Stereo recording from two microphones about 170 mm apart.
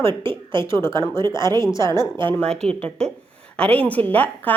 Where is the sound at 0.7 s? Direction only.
15° left (ahead or behind).